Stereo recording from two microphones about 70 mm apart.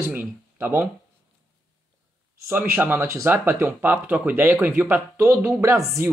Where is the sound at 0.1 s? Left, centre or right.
Right.